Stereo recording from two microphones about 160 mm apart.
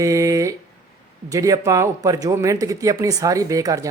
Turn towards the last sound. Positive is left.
turn(degrees=-20)  # may be behind; listen again after turning